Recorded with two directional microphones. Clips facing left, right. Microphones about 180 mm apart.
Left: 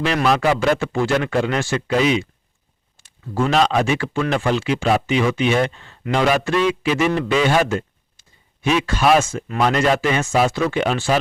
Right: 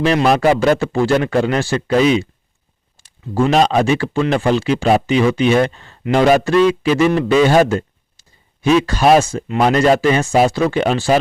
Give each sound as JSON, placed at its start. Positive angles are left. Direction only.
{"t": 0.3, "sound": "a man's voice", "side_deg": -40}